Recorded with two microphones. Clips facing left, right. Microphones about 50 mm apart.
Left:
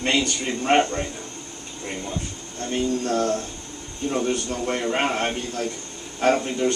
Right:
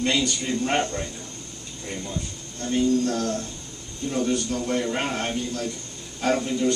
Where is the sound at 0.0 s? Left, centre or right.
Left.